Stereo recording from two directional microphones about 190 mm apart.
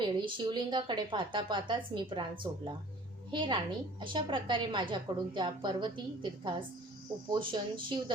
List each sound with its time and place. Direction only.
0.0 s a woman's voice: 25° right (ahead or behind)
3.3 s a woman's voice: 25° right (ahead or behind)